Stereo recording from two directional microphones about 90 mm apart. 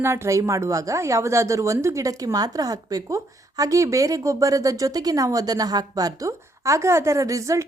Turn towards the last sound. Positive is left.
turn(degrees=-35)  # may be behind; listen again after turning